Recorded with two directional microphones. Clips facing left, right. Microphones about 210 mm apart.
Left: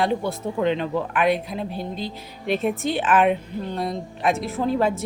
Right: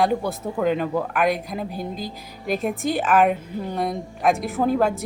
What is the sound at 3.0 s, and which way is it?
A woman's voice, centre (ahead or behind).